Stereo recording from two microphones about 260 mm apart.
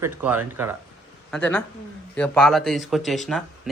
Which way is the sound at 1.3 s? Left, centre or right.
Centre.